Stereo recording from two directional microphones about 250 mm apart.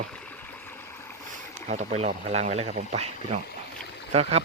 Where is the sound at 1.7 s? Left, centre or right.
Right.